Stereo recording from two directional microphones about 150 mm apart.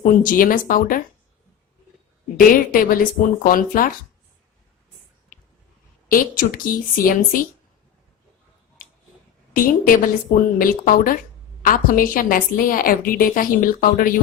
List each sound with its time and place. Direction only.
0.0 s a woman's voice: 65° left (ahead or behind)
2.5 s a woman's voice: 65° left (ahead or behind)
6.1 s a woman's voice: 70° left (ahead or behind)
9.6 s a woman's voice: 65° left (ahead or behind)